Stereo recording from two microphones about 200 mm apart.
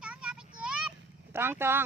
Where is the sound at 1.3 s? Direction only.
10° right (ahead or behind).